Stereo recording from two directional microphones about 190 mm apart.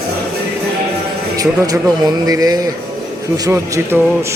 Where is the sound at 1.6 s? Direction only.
20° right (ahead or behind).